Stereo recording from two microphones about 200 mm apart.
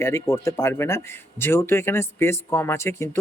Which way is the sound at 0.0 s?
15° left (ahead or behind).